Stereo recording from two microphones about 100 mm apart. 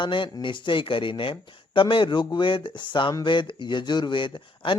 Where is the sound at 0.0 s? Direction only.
55° left (ahead or behind).